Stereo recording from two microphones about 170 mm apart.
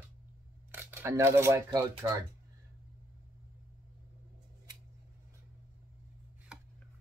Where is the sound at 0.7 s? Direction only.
15° right (ahead or behind).